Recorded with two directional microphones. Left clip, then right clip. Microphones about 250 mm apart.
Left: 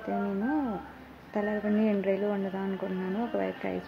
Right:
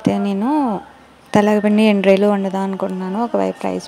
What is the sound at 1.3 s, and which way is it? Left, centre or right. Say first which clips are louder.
Speech: right 16 dB; right.